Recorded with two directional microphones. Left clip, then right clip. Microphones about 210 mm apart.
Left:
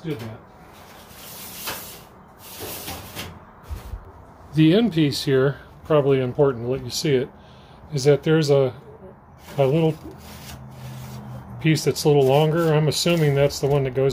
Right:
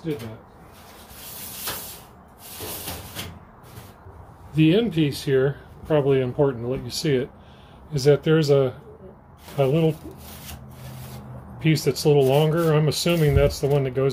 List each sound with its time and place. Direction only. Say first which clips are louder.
4.6 s speech: left 2 dB; 20° left (ahead or behind)
5.9 s speech: left 2 dB; 10° left (ahead or behind)
11.6 s speech: left 1 dB; 5° left (ahead or behind)